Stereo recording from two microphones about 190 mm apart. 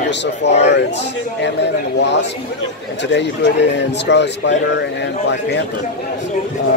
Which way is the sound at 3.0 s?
65° left (ahead or behind).